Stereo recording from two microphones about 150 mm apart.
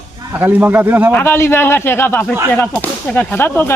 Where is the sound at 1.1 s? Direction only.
15° left (ahead or behind).